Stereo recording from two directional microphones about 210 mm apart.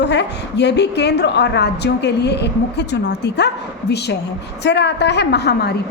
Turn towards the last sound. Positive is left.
turn(degrees=50)  # may be behind; listen again after turning